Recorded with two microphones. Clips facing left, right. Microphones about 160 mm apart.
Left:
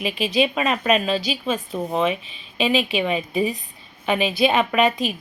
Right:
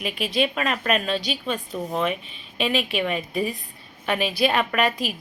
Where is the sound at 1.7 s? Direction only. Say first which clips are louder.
Left 3 dB; 35° left (ahead or behind).